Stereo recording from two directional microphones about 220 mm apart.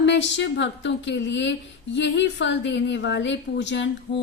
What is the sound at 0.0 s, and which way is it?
A woman's voice, 55° left (ahead or behind).